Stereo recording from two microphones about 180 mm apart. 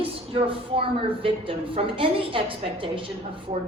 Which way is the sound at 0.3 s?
30° right (ahead or behind).